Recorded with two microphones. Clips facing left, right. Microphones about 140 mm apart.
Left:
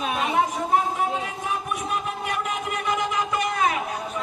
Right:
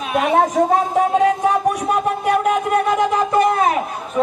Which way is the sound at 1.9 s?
65° right (ahead or behind).